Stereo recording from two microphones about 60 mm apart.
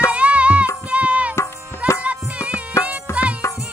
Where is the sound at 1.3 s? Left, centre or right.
Left.